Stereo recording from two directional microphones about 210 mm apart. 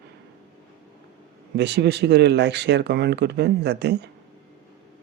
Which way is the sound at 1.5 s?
55° right (ahead or behind).